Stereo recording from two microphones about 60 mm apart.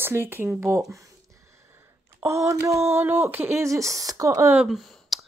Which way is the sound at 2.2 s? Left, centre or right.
Right.